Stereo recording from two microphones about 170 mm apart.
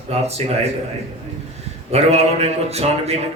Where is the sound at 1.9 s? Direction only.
40° right (ahead or behind).